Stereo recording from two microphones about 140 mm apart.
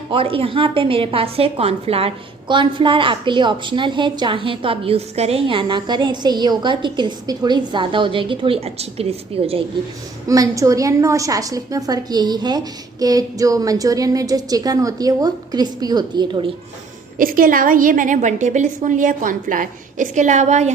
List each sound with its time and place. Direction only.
0.1 s a woman's voice: 40° right (ahead or behind)
10.2 s a woman's voice: 25° right (ahead or behind)
17.2 s a woman's voice: 85° right; by 20.7 s 55° right (ahead or behind)